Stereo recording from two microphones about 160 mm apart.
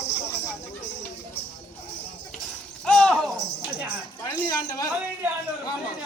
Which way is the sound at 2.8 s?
5° left (ahead or behind).